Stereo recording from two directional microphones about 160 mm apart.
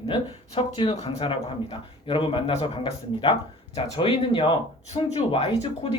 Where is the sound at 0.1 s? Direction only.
35° left (ahead or behind).